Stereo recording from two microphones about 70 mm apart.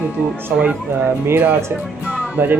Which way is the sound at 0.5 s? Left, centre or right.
Centre.